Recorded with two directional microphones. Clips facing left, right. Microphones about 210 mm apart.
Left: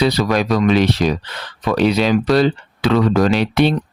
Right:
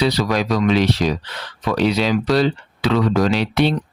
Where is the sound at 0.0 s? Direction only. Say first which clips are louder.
Left 2 dB; 55° left (ahead or behind).